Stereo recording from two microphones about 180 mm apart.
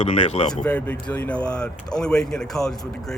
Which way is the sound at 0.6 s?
10° left (ahead or behind).